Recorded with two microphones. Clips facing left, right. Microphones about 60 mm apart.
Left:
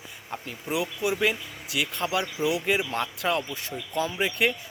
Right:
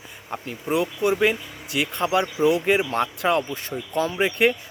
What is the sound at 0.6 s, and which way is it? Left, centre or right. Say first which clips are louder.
Speech: right 6 dB; right.